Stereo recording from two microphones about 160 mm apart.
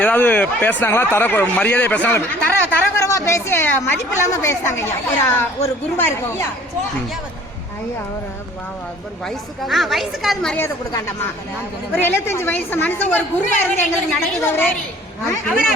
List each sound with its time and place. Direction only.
0.0 s speech: 10° left (ahead or behind)
9.2 s a woman's voice: centre (ahead or behind)
10.6 s speech: 15° left (ahead or behind)